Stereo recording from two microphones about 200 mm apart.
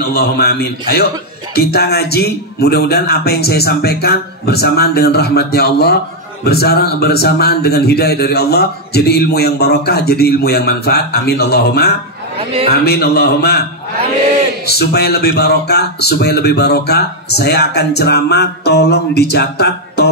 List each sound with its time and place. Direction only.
0.1 s a man's voice: 55° left (ahead or behind)
14.7 s speech: 55° left (ahead or behind)